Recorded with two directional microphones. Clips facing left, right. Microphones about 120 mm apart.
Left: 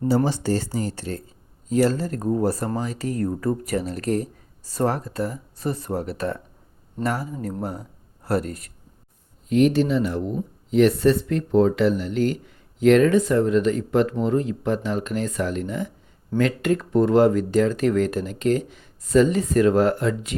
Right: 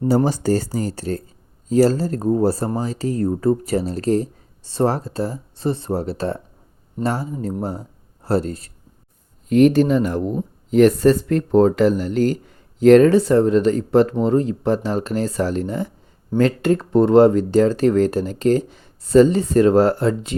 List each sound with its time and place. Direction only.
0.3 s speech: 45° right (ahead or behind)
9.5 s speech: 45° right (ahead or behind)